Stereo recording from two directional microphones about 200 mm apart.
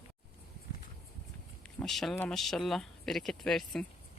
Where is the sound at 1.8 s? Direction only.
Centre (ahead or behind).